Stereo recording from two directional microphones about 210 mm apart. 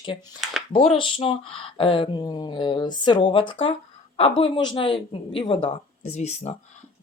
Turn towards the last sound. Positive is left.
turn(degrees=30)  # may be behind; listen again after turning